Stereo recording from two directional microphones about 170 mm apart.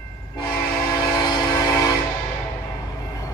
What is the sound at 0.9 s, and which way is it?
Train, 25° left (ahead or behind).